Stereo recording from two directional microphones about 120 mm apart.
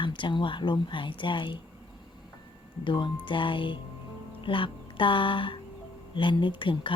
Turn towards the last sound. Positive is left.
turn(degrees=45)  # may be behind; listen again after turning